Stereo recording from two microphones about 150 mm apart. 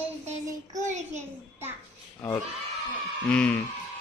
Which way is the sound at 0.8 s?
50° right (ahead or behind).